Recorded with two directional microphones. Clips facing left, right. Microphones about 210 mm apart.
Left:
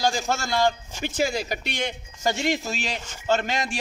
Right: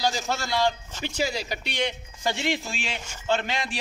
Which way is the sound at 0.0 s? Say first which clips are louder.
Left 2 dB; 50° left (ahead or behind).